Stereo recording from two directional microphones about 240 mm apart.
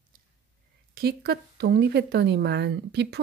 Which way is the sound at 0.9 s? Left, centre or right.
Right.